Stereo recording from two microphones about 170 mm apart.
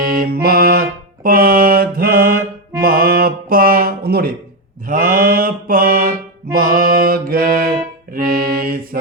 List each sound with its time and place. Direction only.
0.0 s music: 55° right (ahead or behind)
4.9 s mantra: 55° right (ahead or behind)